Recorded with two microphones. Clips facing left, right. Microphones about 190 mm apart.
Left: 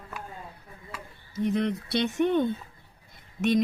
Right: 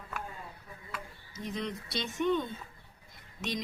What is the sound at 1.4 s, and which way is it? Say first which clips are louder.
Speech: left 10 dB; 60° left (ahead or behind).